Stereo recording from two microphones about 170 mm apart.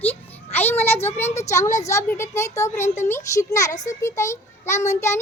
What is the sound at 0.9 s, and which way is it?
A child's voice, 15° left (ahead or behind).